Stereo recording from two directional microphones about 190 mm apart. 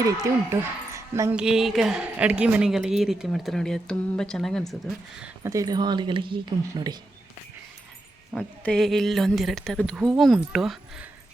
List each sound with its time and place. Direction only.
0.5 s speech: 15° right (ahead or behind)
1.4 s a woman's voice: 5° right (ahead or behind)
5.4 s speech: 15° right (ahead or behind)
8.4 s a woman's voice: 5° left (ahead or behind)